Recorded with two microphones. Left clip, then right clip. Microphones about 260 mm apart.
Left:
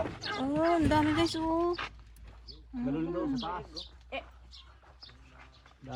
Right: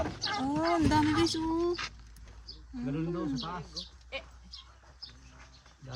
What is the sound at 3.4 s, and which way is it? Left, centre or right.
Speech, left.